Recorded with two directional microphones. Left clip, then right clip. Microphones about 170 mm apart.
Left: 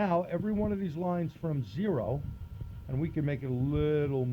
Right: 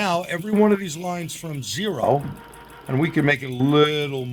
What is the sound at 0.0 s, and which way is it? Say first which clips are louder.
Speech: right 7 dB; 45° left (ahead or behind).